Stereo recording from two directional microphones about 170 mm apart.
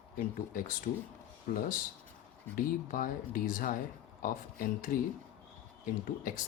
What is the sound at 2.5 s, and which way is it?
Speech, 55° left (ahead or behind).